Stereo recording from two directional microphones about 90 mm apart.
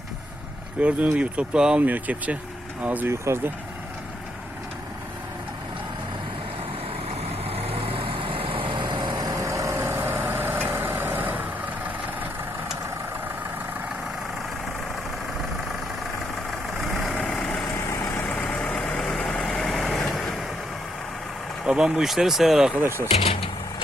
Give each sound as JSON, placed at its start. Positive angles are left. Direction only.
{"t": 0.8, "sound": "speech", "side_deg": -15}
{"t": 3.1, "sound": "speech", "side_deg": -30}
{"t": 7.4, "sound": "vehicle", "side_deg": -90}
{"t": 16.5, "sound": "vehicle", "side_deg": 0}
{"t": 17.2, "sound": "vehicle", "side_deg": 10}
{"t": 17.7, "sound": "vehicle", "side_deg": 25}
{"t": 21.6, "sound": "speech", "side_deg": -10}
{"t": 22.7, "sound": "speech", "side_deg": -25}